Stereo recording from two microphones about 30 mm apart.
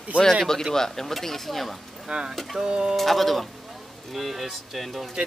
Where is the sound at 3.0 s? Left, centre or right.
Centre.